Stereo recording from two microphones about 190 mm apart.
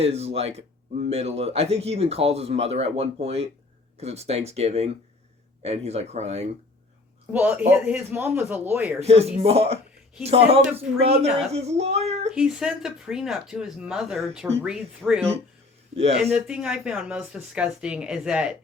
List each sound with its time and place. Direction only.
0.0 s speech: 30° right (ahead or behind)
7.3 s a man's voice: 10° right (ahead or behind)
9.0 s speech: 35° right (ahead or behind)
12.3 s speech: 5° right (ahead or behind)
16.0 s speech: 35° right (ahead or behind)
16.3 s speech: 5° right (ahead or behind)